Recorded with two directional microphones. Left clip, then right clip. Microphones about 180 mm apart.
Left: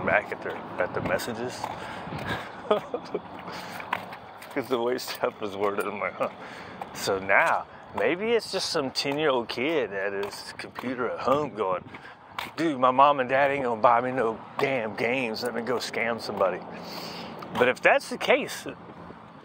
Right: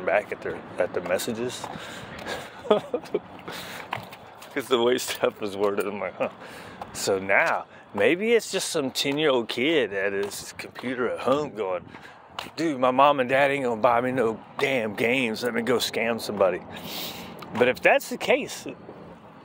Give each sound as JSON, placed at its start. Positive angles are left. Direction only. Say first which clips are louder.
{"t": 0.0, "sound": "speech", "louder": "right 1 dB", "side_deg": -55}
{"t": 8.0, "sound": "speech", "louder": "right 4 dB", "side_deg": -55}
{"t": 14.0, "sound": "speech", "louder": "right 2 dB", "side_deg": -55}
{"t": 17.2, "sound": "speech", "louder": "right 1 dB", "side_deg": -45}